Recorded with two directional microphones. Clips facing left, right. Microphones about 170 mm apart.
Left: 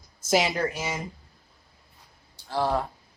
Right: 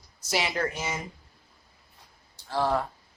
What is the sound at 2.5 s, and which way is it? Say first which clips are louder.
Speech: even; 15° left (ahead or behind).